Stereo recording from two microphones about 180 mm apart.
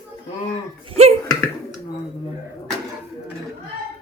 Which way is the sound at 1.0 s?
35° right (ahead or behind).